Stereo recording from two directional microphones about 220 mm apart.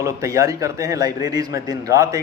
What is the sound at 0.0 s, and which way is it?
Speech, 15° right (ahead or behind).